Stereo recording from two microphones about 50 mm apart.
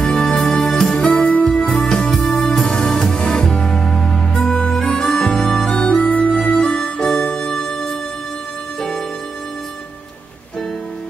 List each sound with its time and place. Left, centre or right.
0.0 s music: centre
6.2 s harmonica: centre